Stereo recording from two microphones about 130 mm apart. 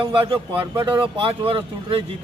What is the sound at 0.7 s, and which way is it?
Speech, 20° right (ahead or behind).